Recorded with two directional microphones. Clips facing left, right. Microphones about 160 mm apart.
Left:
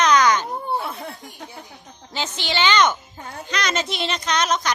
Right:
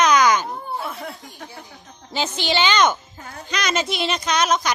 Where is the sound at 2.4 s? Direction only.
15° right (ahead or behind).